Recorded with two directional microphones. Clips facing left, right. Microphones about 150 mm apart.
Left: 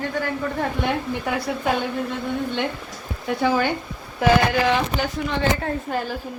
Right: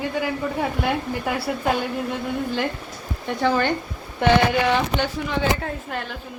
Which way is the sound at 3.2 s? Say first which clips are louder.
Even; 10° left (ahead or behind).